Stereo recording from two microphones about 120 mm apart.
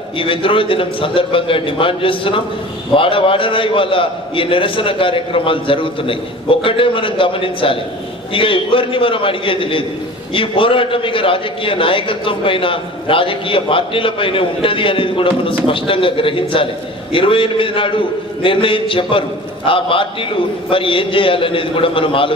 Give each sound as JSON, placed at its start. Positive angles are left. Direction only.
{"t": 0.2, "sound": "a man's voice", "side_deg": 45}